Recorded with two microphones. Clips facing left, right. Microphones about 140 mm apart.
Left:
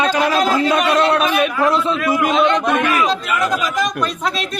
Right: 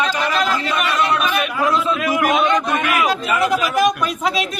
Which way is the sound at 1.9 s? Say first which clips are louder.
Left 1 dB; 15° right (ahead or behind).